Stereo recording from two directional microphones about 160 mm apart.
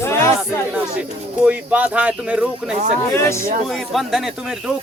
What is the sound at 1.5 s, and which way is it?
Speech, 10° right (ahead or behind).